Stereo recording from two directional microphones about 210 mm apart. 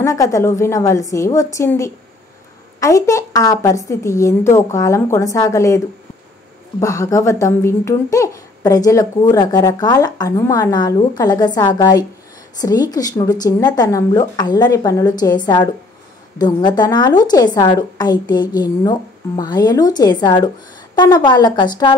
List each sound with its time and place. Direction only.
0.0 s speech: 15° left (ahead or behind)
6.8 s a woman's voice: 15° left (ahead or behind)